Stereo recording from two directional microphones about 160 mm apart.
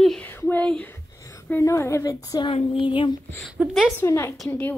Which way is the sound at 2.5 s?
35° left (ahead or behind).